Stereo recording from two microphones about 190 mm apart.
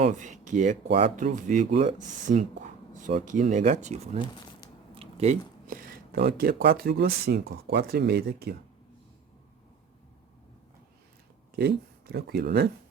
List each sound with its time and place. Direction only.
0.0 s speech: 40° right (ahead or behind)
2.2 s a sound: 45° right (ahead or behind)
3.2 s speech: 40° right (ahead or behind)
4.9 s a sound: 35° right (ahead or behind)
5.6 s speech: 45° right (ahead or behind)
11.5 s speech: 55° right (ahead or behind)